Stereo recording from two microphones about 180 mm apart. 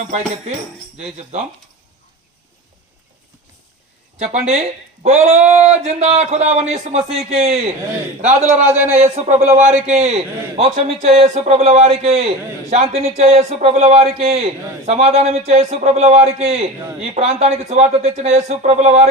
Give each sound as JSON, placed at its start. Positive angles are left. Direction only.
{"t": 1.1, "sound": "a man's voice", "side_deg": -40}
{"t": 4.2, "sound": "a man's voice", "side_deg": -40}
{"t": 5.4, "sound": "speech", "side_deg": -5}
{"t": 5.6, "sound": "a man's voice", "side_deg": -40}
{"t": 8.5, "sound": "a man's voice", "side_deg": -10}
{"t": 8.9, "sound": "a man's voice", "side_deg": -40}